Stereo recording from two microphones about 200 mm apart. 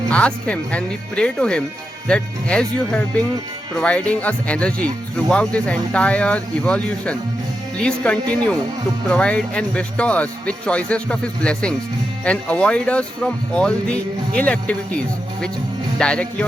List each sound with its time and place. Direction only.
0.1 s speech: 5° left (ahead or behind)